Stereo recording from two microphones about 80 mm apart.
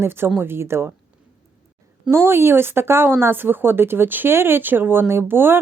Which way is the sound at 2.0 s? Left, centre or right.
Right.